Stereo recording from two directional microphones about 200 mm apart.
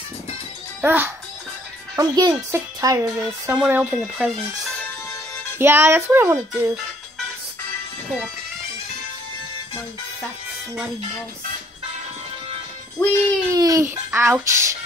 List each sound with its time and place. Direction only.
0.8 s speech: 10° right (ahead or behind)
5.6 s speech: 10° right (ahead or behind)
13.0 s music: 10° left (ahead or behind)
13.5 s a child's voice: 15° right (ahead or behind)